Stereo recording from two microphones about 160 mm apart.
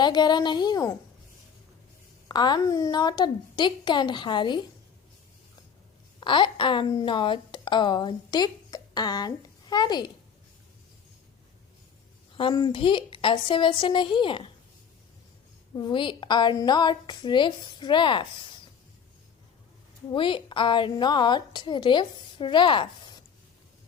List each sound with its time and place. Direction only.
0.0 s a woman's voice: 25° left (ahead or behind)
2.2 s a woman's voice: 25° left (ahead or behind)
6.1 s speech: 30° left (ahead or behind)
12.3 s a woman's voice: 30° left (ahead or behind)
15.7 s a woman's voice: 30° left (ahead or behind)
20.1 s a woman's voice: 30° left (ahead or behind)